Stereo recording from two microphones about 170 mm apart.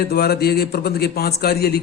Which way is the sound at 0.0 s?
65° left (ahead or behind).